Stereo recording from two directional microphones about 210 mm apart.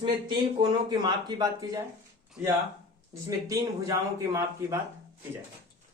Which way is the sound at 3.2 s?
15° right (ahead or behind).